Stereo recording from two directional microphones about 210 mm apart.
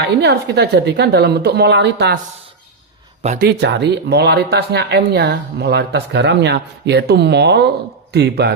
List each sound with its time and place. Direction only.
0.0 s speech: 55° right (ahead or behind)
3.2 s speech: 45° right (ahead or behind)